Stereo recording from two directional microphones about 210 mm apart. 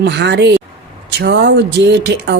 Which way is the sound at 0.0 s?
55° right (ahead or behind).